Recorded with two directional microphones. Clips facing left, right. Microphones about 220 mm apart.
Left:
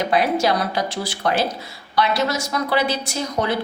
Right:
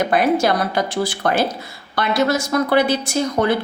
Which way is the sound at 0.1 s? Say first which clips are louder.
Even; 50° right (ahead or behind).